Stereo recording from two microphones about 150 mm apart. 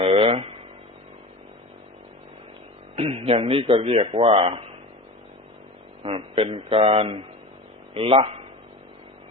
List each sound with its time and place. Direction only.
0.0 s a sound: 40° right (ahead or behind)
2.9 s speech: 40° right (ahead or behind)
6.0 s speech: 40° right (ahead or behind)